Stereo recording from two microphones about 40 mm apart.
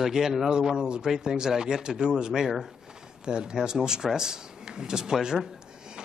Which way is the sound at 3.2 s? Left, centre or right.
Right.